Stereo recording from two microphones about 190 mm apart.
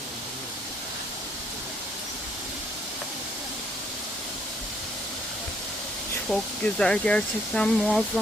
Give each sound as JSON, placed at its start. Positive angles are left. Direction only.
{"t": 6.2, "sound": "speech", "side_deg": 5}